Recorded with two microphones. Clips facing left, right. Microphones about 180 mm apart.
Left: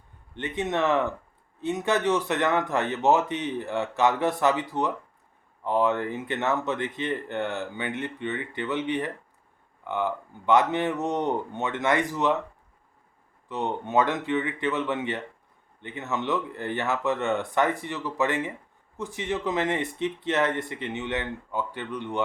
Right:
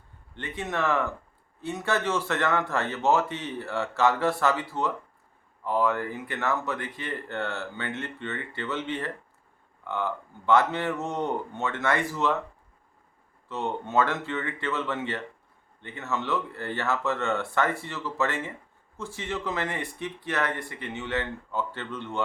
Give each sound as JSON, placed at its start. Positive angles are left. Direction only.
{"t": 0.3, "sound": "speech", "side_deg": 20}
{"t": 13.5, "sound": "speech", "side_deg": 15}